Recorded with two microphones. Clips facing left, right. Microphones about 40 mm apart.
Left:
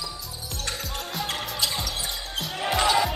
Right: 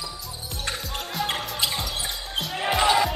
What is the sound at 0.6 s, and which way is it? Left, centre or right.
Music, centre.